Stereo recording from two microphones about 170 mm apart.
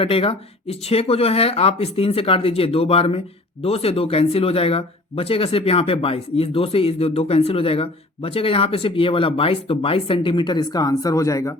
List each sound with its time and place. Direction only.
0.0 s speech: 35° left (ahead or behind); by 11.5 s 20° left (ahead or behind)